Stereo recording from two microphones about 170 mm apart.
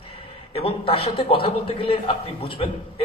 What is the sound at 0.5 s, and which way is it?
A man's voice, 35° left (ahead or behind).